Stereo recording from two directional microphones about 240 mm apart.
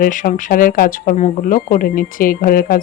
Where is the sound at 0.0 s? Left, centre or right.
Left.